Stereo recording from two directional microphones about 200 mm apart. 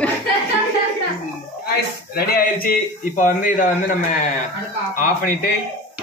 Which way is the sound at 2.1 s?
50° left (ahead or behind).